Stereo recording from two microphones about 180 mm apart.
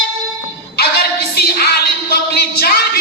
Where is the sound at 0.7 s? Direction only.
60° left (ahead or behind).